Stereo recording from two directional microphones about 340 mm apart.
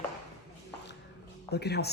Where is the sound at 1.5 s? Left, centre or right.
Left.